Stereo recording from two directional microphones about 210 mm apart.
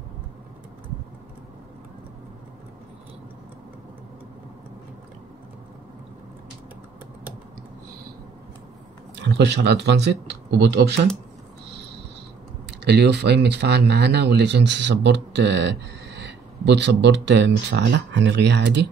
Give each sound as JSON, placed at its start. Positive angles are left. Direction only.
{"t": 9.1, "sound": "speech", "side_deg": -55}
{"t": 11.7, "sound": "a sound", "side_deg": -55}
{"t": 12.8, "sound": "speech", "side_deg": -55}